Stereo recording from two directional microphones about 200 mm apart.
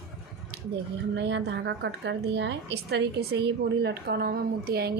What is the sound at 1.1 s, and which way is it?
A woman's voice, 60° right (ahead or behind).